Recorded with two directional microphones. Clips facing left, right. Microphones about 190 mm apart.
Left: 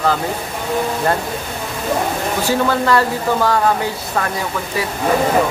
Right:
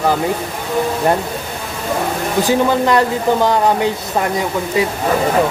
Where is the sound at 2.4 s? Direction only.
15° right (ahead or behind).